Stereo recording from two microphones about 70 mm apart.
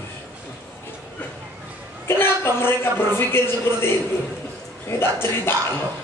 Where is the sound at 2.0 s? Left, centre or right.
Left.